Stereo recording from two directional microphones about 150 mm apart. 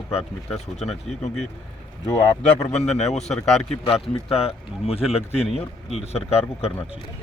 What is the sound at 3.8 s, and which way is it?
Speech, 40° left (ahead or behind).